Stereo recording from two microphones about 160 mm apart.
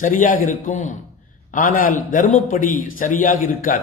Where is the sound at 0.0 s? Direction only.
60° left (ahead or behind).